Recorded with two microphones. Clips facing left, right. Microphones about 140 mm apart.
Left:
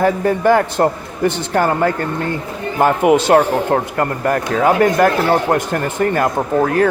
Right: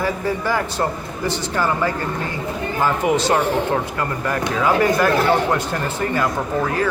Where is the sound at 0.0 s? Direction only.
60° left (ahead or behind).